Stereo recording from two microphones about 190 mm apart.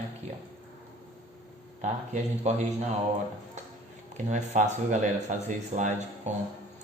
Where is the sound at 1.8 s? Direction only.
40° right (ahead or behind).